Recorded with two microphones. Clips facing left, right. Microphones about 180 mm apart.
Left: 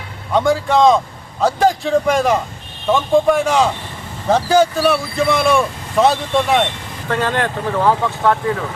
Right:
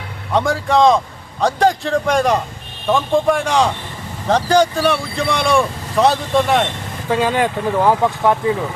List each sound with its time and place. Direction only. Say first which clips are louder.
0.3 s speech: left 1 dB; centre (ahead or behind)
7.1 s speech: right 2 dB; 10° right (ahead or behind)